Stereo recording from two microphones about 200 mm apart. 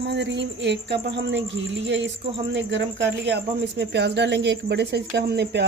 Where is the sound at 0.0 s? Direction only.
60° right (ahead or behind).